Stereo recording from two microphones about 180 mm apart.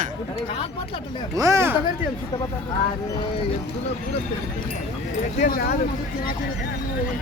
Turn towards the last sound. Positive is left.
turn(degrees=55)  # may be behind; listen again after turning